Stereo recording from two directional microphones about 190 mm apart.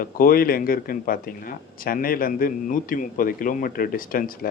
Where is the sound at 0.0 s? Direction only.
50° left (ahead or behind).